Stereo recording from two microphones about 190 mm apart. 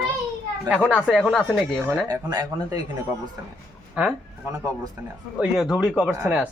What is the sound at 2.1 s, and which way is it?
Speech, 20° right (ahead or behind).